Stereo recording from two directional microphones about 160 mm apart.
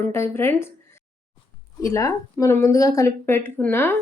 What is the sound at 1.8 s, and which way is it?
Speech, 20° left (ahead or behind).